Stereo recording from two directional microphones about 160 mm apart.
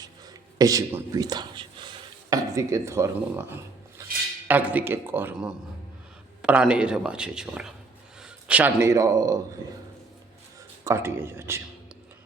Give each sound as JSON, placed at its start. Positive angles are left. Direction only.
{"t": 0.6, "sound": "speech", "side_deg": -20}
{"t": 4.4, "sound": "a man's voice", "side_deg": -10}
{"t": 10.8, "sound": "speech", "side_deg": -15}